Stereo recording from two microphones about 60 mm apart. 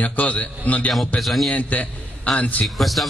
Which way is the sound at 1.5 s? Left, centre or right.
Left.